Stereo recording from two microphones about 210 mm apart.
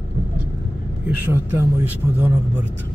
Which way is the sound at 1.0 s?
10° right (ahead or behind).